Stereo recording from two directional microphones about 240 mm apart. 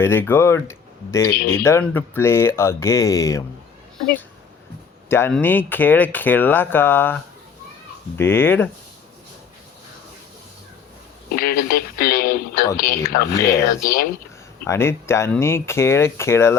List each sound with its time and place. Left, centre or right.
0.0 s speech: centre
5.0 s speech: centre
8.2 s speech: centre
11.3 s speech: left
14.6 s speech: centre